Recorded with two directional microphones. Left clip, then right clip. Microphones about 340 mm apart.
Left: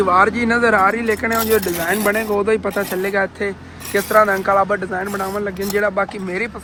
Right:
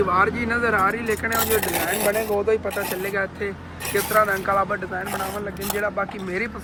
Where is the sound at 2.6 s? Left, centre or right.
Centre.